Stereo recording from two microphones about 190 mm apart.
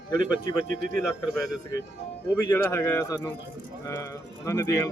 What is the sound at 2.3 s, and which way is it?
Speech, 15° left (ahead or behind).